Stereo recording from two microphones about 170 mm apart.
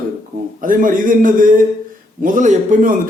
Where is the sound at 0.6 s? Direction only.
50° right (ahead or behind).